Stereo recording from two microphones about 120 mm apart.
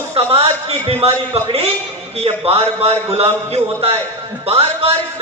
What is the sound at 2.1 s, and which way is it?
A man's voice, 55° right (ahead or behind).